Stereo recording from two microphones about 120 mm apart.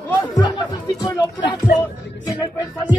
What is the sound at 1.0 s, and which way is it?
Music, 35° left (ahead or behind).